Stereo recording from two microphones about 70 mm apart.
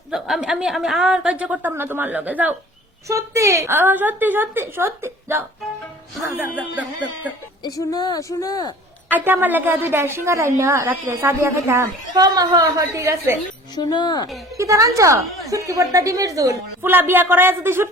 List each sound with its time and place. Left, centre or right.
0.1 s a woman's voice: centre
1.7 s a woman's voice: right
3.1 s a woman's voice: right
6.7 s a woman's voice: right
7.9 s speech: left
8.2 s speech: left
9.0 s a woman's voice: right
12.1 s a woman's voice: right
13.7 s speech: left
14.5 s speech: right
15.2 s a woman's voice: centre
15.4 s speech: right
16.8 s a woman's voice: right